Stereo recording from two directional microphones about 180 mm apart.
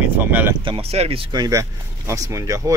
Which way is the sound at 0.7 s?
30° right (ahead or behind).